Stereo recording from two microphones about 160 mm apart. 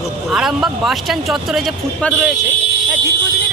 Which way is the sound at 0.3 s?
Centre (ahead or behind).